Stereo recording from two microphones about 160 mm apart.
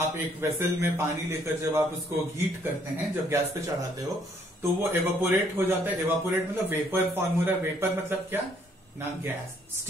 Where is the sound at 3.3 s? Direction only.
20° right (ahead or behind).